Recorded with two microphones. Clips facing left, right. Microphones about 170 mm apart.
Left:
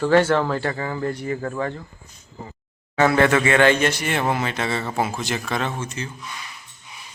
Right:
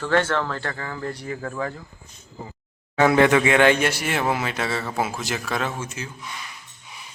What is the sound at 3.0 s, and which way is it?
Speech, 15° right (ahead or behind).